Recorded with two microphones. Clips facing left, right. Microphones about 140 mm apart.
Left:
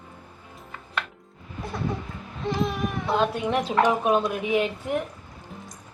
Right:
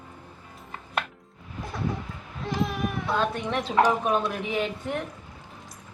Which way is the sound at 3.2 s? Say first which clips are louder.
Left 5 dB; 10° left (ahead or behind).